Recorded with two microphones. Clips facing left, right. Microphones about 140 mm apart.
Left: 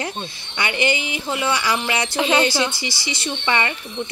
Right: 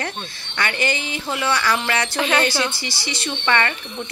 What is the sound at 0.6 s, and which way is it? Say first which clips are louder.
Speech: left 2 dB; 15° left (ahead or behind).